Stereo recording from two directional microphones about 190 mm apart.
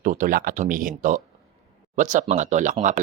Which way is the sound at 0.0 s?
45° right (ahead or behind).